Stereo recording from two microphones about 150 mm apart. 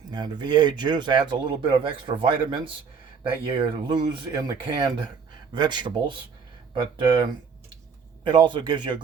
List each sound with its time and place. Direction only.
0.1 s speech: 30° right (ahead or behind)